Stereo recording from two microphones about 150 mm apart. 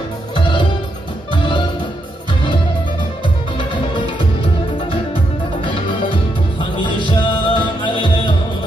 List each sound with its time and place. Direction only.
7.1 s music: 35° left (ahead or behind)